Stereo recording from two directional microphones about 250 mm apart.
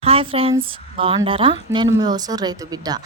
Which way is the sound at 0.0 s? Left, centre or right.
Right.